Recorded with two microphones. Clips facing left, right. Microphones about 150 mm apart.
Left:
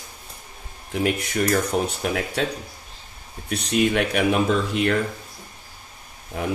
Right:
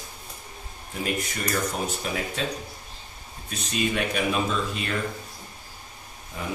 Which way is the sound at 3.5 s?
70° left (ahead or behind).